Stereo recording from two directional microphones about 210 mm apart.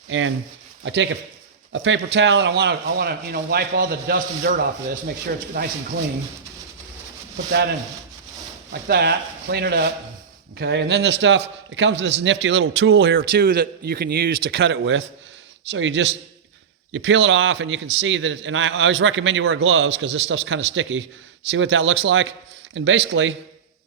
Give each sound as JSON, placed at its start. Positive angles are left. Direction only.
{"t": 0.1, "sound": "a man's voice", "side_deg": -65}
{"t": 8.7, "sound": "a man's voice", "side_deg": -50}
{"t": 13.1, "sound": "a man's voice", "side_deg": -45}